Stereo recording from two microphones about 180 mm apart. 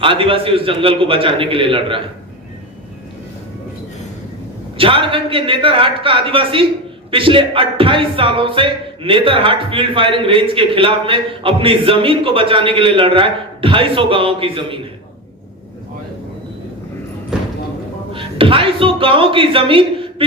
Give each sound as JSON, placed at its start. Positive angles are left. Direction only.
{"t": 0.0, "sound": "speech", "side_deg": -30}
{"t": 4.8, "sound": "speech", "side_deg": -30}
{"t": 17.3, "sound": "a sound", "side_deg": -5}
{"t": 18.1, "sound": "speech", "side_deg": -30}